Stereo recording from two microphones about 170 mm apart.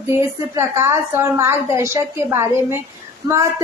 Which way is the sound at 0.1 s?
15° right (ahead or behind).